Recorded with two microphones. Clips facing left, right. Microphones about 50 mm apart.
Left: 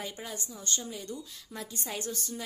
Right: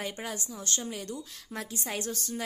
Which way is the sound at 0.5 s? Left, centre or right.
Right.